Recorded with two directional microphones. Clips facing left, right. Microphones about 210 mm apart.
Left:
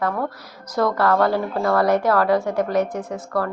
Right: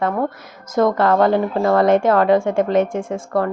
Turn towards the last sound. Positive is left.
turn(degrees=-25)  # may be behind; listen again after turning